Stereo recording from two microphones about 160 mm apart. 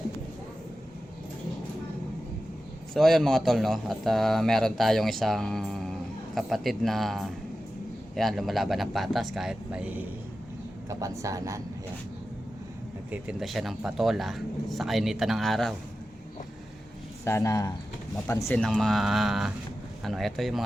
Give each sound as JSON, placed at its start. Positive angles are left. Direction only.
{"t": 2.9, "sound": "a man's voice", "side_deg": 0}
{"t": 10.8, "sound": "speech", "side_deg": -20}
{"t": 13.1, "sound": "a man's voice", "side_deg": -5}
{"t": 17.2, "sound": "speech", "side_deg": 15}
{"t": 18.6, "sound": "a man's voice", "side_deg": 0}